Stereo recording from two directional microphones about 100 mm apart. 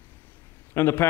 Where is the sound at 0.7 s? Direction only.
25° left (ahead or behind).